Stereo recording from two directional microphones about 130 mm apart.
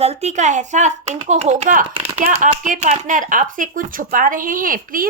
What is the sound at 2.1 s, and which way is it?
Speech, 70° right (ahead or behind).